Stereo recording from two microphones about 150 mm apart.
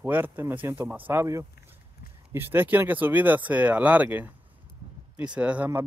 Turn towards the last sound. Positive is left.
turn(degrees=-10)  # may be behind; listen again after turning